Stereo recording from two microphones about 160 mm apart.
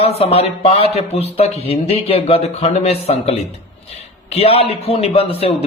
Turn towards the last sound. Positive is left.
turn(degrees=35)  # may be behind; listen again after turning